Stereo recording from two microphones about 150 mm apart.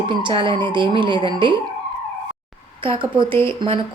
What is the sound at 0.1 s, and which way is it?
A woman's voice, 30° right (ahead or behind).